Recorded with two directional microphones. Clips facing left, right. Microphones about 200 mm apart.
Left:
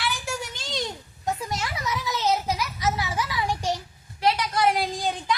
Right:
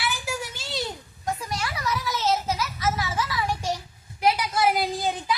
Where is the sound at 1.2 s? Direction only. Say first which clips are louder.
Left 1 dB; 20° left (ahead or behind).